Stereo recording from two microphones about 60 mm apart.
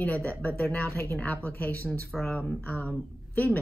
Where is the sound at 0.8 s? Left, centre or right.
Left.